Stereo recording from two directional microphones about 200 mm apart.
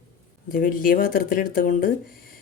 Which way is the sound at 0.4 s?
45° left (ahead or behind).